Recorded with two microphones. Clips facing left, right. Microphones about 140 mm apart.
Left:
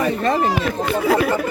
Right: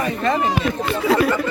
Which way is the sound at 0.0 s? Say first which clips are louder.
Left 2 dB; 30° left (ahead or behind).